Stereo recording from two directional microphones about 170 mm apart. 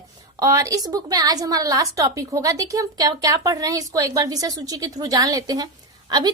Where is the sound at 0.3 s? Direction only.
20° right (ahead or behind).